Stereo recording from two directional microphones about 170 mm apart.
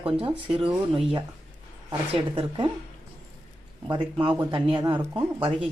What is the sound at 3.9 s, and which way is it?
Speech, 30° right (ahead or behind).